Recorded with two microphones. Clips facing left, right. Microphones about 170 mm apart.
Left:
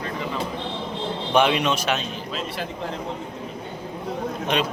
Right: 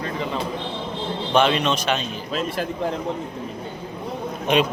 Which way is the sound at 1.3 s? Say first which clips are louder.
Right 1 dB; 10° left (ahead or behind).